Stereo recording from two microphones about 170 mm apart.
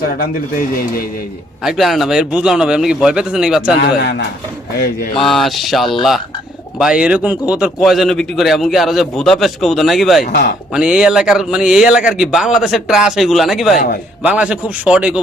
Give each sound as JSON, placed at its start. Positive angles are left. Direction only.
{"t": 0.2, "sound": "a man's voice", "side_deg": 60}
{"t": 1.6, "sound": "speech", "side_deg": 0}
{"t": 3.8, "sound": "a man's voice", "side_deg": 70}
{"t": 5.2, "sound": "speech", "side_deg": 0}